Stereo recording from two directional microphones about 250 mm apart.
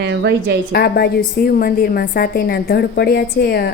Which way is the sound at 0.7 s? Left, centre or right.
Left.